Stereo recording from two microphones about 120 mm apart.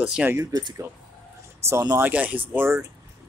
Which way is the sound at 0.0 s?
5° right (ahead or behind).